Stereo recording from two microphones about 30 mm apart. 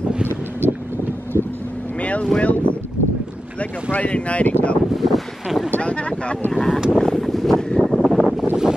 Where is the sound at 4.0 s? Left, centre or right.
Left.